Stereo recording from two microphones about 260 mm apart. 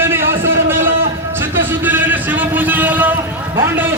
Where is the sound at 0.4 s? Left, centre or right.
Right.